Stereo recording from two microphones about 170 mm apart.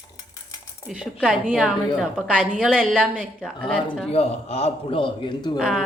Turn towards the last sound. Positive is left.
turn(degrees=0)  # may be behind; listen again after turning